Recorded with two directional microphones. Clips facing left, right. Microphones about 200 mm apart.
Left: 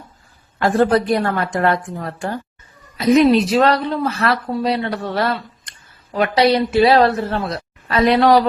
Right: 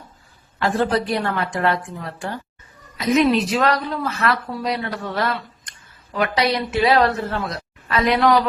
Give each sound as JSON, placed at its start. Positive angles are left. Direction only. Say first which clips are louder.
{"t": 0.6, "sound": "a woman's voice", "louder": "left 5 dB", "side_deg": 50}